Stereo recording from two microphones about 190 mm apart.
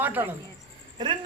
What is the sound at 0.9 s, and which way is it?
Speech, 25° right (ahead or behind).